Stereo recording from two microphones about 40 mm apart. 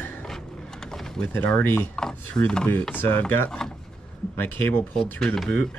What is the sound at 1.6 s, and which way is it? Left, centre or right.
Speech, left.